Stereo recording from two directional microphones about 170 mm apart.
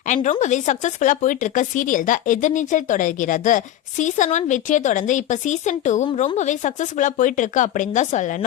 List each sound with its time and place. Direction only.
0.1 s speech: 45° left (ahead or behind)